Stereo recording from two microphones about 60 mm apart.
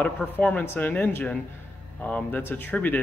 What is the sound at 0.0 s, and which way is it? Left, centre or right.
A man's voice, left.